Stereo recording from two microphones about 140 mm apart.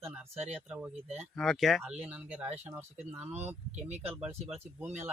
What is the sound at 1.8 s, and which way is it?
Speech, 10° right (ahead or behind).